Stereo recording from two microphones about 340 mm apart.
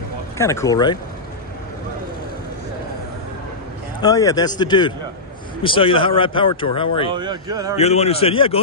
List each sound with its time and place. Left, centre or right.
0.4 s speech: centre
4.0 s speech: centre
7.1 s speech: centre
7.7 s speech: centre